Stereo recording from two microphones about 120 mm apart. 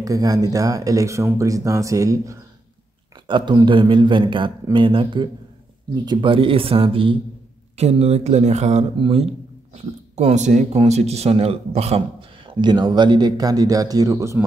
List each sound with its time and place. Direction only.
0.0 s speech: 30° right (ahead or behind)
3.3 s a man's voice: 40° right (ahead or behind)
7.7 s speech: 60° right (ahead or behind)
8.9 s a man's voice: 50° right (ahead or behind)
10.1 s a man's voice: 70° right (ahead or behind); by 14.4 s 25° right (ahead or behind)